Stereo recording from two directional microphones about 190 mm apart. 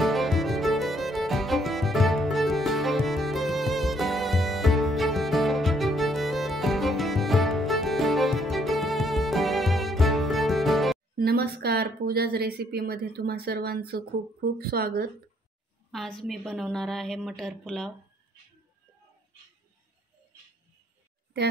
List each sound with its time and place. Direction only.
0.0 s music: centre (ahead or behind)
11.1 s a woman's voice: 55° right (ahead or behind)
15.9 s a woman's voice: centre (ahead or behind)